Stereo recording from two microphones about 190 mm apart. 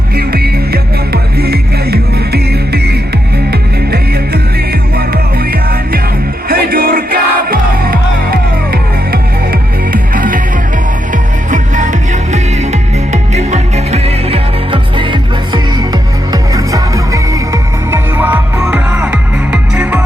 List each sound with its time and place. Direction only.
0.2 s music: 55° right (ahead or behind)
11.5 s music: 40° right (ahead or behind); by 20.0 s 5° right (ahead or behind)